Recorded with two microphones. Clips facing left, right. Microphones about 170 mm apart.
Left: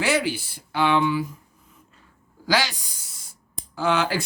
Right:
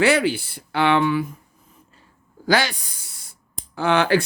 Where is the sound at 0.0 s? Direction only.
60° right (ahead or behind).